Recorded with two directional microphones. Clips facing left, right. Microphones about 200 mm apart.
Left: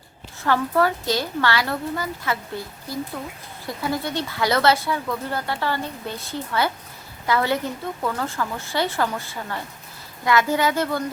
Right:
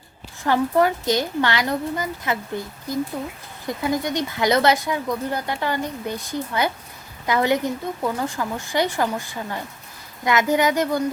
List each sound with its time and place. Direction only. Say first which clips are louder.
0.4 s a woman's voice: right 2 dB; 15° right (ahead or behind)